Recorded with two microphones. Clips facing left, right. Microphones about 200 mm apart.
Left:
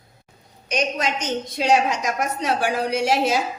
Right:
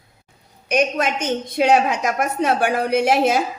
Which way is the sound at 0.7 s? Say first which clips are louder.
Right 4 dB; 55° right (ahead or behind).